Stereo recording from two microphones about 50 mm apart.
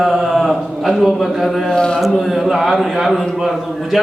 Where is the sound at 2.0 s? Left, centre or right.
Centre.